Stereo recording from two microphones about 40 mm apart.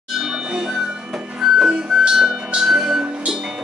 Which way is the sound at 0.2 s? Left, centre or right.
Centre.